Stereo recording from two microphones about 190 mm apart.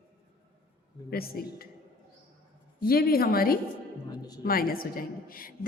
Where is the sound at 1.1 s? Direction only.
55° left (ahead or behind).